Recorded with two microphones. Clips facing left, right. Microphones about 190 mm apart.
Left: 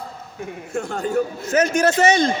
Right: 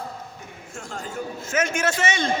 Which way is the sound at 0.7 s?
65° left (ahead or behind).